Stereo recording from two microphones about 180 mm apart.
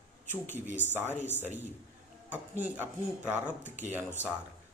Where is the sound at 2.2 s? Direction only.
10° right (ahead or behind).